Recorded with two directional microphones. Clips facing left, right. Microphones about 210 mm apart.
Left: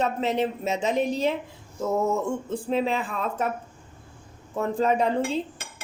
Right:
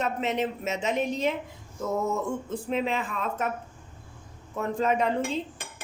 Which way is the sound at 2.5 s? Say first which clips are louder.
Left 4 dB; 35° left (ahead or behind).